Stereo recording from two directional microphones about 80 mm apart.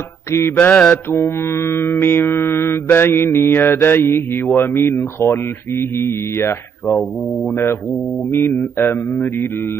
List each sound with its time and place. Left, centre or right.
0.6 s mantra: centre
1.1 s mantra: left
4.8 s speech: left
8.3 s mantra: left